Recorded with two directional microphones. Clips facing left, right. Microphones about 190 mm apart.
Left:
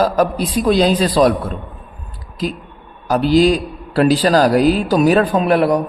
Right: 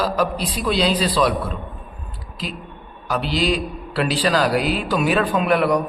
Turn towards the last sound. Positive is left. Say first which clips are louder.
# left 4 dB
turn(degrees=35)  # may be behind; listen again after turning